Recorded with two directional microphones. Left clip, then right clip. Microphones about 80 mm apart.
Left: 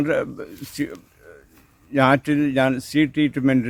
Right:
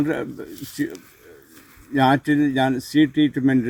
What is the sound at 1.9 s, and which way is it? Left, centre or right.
Speech, left.